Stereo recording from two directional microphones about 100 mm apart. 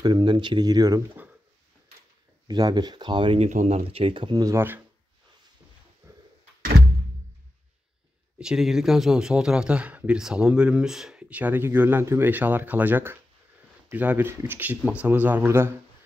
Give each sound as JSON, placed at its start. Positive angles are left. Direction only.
{"t": 0.0, "sound": "speech", "side_deg": -50}
{"t": 2.4, "sound": "speech", "side_deg": -45}
{"t": 3.3, "sound": "speech", "side_deg": -80}
{"t": 8.4, "sound": "speech", "side_deg": -5}